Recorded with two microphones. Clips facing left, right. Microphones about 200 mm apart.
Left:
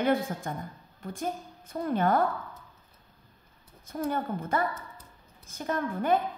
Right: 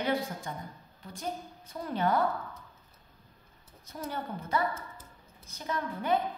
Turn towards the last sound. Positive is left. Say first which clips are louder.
# left 3 dB
turn(degrees=50)  # may be behind; listen again after turning